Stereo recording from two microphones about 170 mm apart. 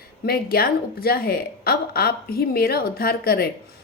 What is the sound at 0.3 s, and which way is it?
A woman's voice, 60° left (ahead or behind).